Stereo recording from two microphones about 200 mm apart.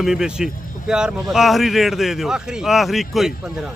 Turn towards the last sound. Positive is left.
turn(degrees=0)  # may be behind; listen again after turning